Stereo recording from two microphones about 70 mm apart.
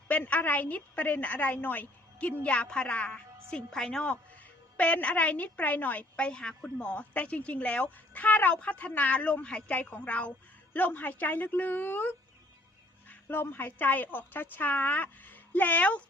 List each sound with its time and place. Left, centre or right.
0.1 s a woman's voice: left